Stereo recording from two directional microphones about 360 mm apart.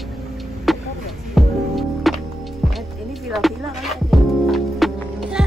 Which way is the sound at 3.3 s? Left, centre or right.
Centre.